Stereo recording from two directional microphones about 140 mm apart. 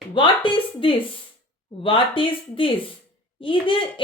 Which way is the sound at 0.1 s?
35° left (ahead or behind).